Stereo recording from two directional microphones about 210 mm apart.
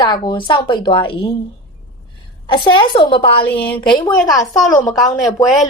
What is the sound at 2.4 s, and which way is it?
A woman's voice, 25° left (ahead or behind).